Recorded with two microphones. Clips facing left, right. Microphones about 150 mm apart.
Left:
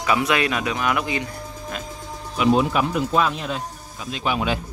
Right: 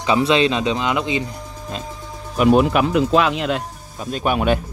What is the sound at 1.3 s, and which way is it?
Music, 25° right (ahead or behind).